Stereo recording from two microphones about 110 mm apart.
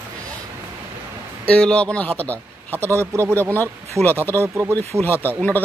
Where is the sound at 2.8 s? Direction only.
25° right (ahead or behind).